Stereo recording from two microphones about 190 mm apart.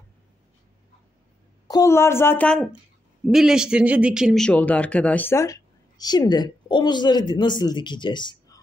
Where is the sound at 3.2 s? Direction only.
5° right (ahead or behind); by 8.6 s 20° left (ahead or behind).